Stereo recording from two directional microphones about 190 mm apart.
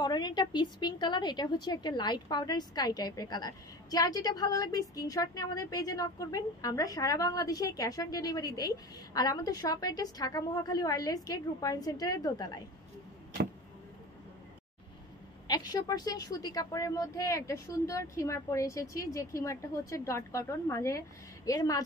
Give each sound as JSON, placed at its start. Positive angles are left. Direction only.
{"t": 0.0, "sound": "a woman's voice", "side_deg": 20}
{"t": 15.4, "sound": "a woman's voice", "side_deg": 20}